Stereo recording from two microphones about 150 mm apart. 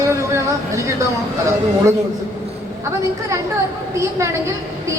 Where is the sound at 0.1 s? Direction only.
20° right (ahead or behind).